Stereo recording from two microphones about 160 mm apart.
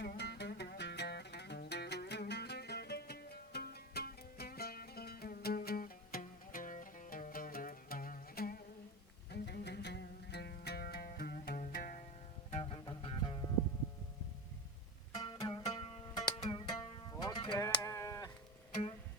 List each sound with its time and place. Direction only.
0.0 s music: 85° left; by 8.6 s 65° left (ahead or behind)
9.3 s music: 90° left; by 12.0 s 60° left (ahead or behind)
12.5 s music: 40° left (ahead or behind)
13.0 s music: 30° left (ahead or behind)
15.2 s music: 25° left (ahead or behind)
17.8 s sheep: 20° left (ahead or behind)